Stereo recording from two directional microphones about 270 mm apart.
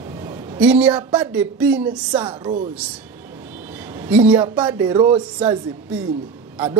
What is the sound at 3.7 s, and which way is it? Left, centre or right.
A woman's voice, centre.